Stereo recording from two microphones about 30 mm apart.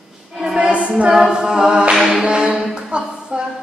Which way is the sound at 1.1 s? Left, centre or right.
Right.